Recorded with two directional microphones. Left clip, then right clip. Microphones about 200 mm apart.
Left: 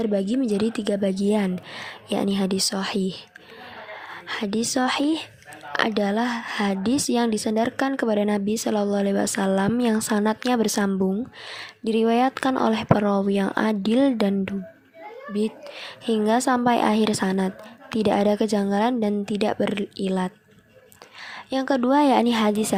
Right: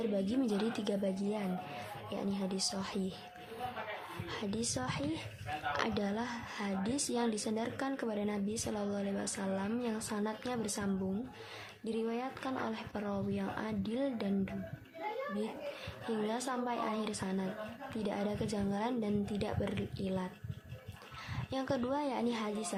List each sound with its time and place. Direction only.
0.0 s a woman's voice: 40° left (ahead or behind)
4.3 s a woman's voice: 40° left (ahead or behind)
21.3 s speech: 40° left (ahead or behind)